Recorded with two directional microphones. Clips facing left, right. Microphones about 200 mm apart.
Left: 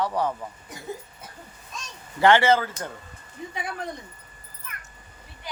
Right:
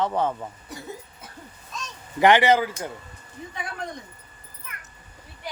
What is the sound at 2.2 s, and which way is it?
Speech, 15° right (ahead or behind).